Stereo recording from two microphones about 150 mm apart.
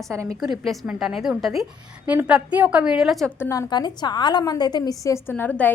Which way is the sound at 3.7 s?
30° left (ahead or behind).